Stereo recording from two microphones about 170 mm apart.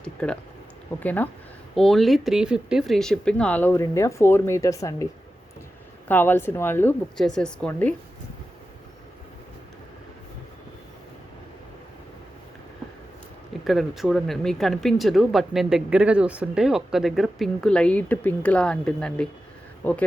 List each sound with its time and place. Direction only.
0.0 s a sound: 5° left (ahead or behind)
0.9 s speech: 10° left (ahead or behind)
6.1 s speech: 10° left (ahead or behind)
13.7 s speech: centre (ahead or behind)